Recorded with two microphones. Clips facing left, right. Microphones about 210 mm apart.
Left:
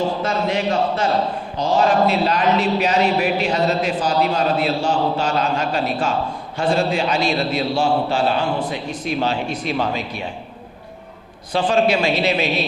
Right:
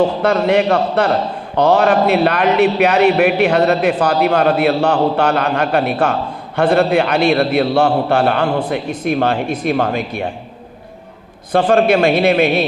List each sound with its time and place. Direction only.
0.0 s a man's voice: 65° right (ahead or behind)
11.5 s a man's voice: 55° right (ahead or behind)